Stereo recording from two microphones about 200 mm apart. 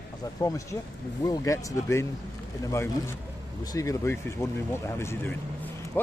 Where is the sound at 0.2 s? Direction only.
15° left (ahead or behind).